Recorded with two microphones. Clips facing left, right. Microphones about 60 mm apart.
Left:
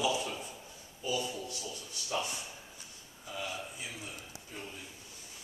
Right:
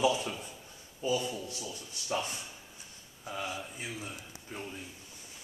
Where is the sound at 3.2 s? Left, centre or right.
Right.